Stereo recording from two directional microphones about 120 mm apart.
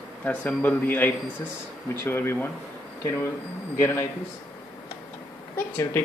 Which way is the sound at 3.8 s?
25° left (ahead or behind).